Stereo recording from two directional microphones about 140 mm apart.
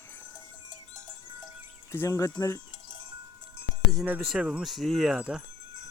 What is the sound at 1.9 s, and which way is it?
Speech, 20° left (ahead or behind).